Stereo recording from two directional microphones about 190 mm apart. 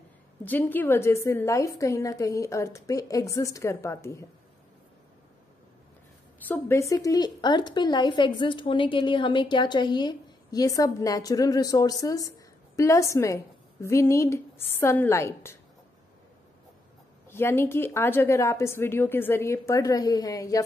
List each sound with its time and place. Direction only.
0.5 s a woman's voice: 10° left (ahead or behind)
6.4 s a woman's voice: 10° left (ahead or behind)
17.3 s a woman's voice: 10° left (ahead or behind)